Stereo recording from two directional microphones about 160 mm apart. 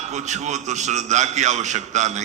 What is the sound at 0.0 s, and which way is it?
A man's voice, 45° right (ahead or behind).